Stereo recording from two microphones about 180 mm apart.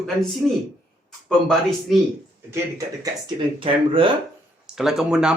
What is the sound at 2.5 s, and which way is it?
Speech, 15° right (ahead or behind).